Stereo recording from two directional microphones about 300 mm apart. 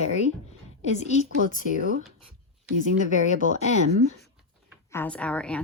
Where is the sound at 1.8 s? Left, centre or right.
Right.